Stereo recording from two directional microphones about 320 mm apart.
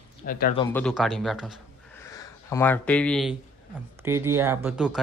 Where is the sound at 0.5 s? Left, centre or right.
Centre.